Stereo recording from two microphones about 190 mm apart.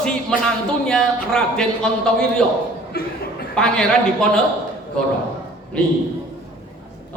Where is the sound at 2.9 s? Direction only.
55° left (ahead or behind).